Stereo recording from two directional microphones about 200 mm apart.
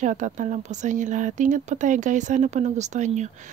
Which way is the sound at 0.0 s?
40° right (ahead or behind).